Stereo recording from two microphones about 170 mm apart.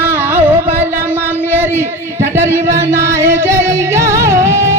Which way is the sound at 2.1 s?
15° right (ahead or behind).